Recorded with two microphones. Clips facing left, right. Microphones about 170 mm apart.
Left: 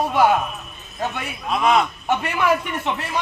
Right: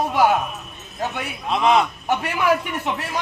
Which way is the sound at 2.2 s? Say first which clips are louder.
Right 1 dB; 10° right (ahead or behind).